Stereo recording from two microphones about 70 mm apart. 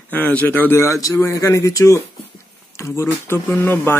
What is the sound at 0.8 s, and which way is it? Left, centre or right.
Speech, left.